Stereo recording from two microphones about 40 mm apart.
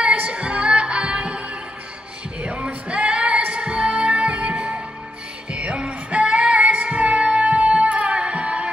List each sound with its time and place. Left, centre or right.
0.0 s music: right